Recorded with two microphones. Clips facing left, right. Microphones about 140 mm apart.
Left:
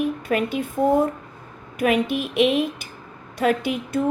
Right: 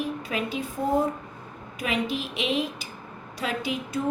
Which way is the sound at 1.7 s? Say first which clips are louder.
Left 7 dB; 55° left (ahead or behind).